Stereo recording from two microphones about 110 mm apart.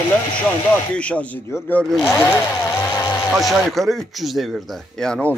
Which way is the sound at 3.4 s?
Centre (ahead or behind).